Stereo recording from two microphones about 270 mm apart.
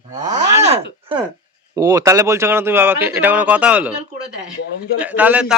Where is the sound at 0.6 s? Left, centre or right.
Right.